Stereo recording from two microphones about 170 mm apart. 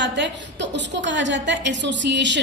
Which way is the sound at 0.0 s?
90° right.